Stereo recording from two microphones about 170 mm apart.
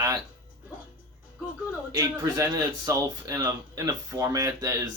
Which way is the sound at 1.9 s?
20° right (ahead or behind).